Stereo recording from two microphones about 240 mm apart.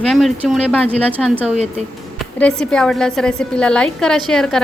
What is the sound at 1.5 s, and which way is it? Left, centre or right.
Speech, right.